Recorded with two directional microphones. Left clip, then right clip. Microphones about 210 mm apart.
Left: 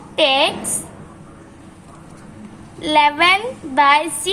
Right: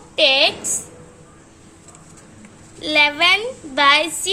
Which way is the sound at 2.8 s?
20° right (ahead or behind).